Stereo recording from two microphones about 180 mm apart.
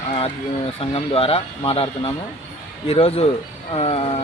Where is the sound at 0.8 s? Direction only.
30° left (ahead or behind).